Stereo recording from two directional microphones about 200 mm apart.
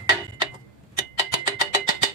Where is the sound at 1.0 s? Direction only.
20° right (ahead or behind).